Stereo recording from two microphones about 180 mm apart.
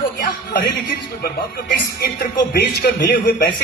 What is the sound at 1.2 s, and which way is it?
Speech, 60° left (ahead or behind).